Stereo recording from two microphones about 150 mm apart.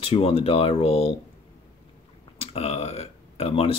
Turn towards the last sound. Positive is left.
turn(degrees=40)  # may be behind; listen again after turning